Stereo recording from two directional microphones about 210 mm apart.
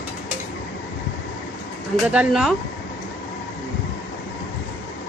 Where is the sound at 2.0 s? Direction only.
5° right (ahead or behind).